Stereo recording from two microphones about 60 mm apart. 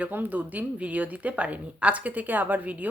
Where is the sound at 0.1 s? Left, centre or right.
Right.